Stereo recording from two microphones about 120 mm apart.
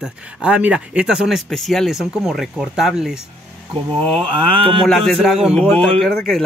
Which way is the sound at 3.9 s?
50° right (ahead or behind).